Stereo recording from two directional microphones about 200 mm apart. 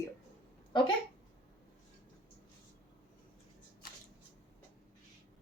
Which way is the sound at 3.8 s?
50° left (ahead or behind).